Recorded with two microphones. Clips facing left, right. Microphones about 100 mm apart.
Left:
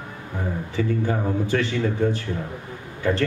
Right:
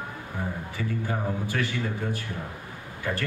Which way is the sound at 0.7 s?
25° left (ahead or behind).